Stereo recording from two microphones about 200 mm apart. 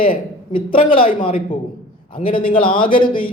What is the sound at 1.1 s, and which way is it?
A man's voice, 25° left (ahead or behind).